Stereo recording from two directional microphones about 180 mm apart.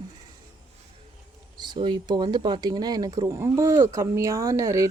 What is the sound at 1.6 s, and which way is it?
Speech, 25° right (ahead or behind).